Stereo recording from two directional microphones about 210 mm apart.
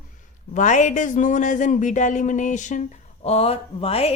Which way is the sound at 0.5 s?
35° left (ahead or behind).